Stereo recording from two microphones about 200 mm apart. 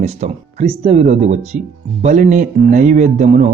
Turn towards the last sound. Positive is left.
turn(degrees=-35)  # may be behind; listen again after turning